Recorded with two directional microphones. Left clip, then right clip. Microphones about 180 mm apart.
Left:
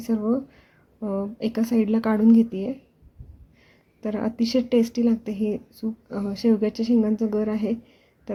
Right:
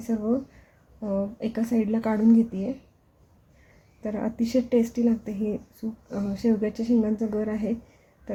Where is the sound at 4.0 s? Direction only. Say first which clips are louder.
Left 3 dB; 15° left (ahead or behind).